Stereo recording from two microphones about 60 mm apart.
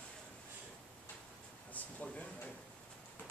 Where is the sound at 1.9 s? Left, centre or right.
Left.